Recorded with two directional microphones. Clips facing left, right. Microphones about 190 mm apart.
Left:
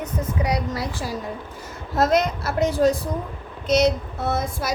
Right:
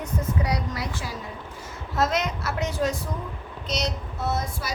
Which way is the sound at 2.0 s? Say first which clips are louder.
Left 5 dB; 35° left (ahead or behind).